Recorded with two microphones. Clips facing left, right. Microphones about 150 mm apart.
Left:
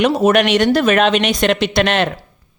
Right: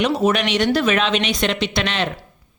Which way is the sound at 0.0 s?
55° left (ahead or behind).